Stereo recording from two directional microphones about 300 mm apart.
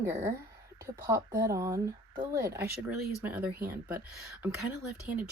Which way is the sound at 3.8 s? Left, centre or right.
Centre.